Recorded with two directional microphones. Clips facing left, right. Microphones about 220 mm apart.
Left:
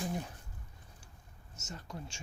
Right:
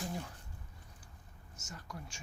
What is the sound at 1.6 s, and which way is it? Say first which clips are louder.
Speech: left 3 dB; 25° left (ahead or behind).